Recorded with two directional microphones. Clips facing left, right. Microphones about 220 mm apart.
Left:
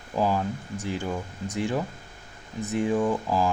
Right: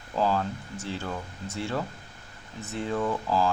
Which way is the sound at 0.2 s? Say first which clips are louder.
Left 1 dB; 15° left (ahead or behind).